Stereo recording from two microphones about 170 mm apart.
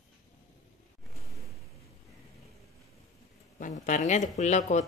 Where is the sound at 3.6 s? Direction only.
50° left (ahead or behind).